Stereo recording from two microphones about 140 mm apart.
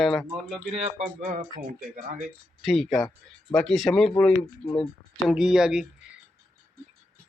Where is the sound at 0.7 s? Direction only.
50° right (ahead or behind).